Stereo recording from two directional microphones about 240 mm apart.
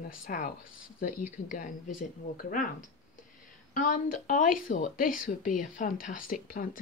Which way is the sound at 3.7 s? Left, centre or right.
Left.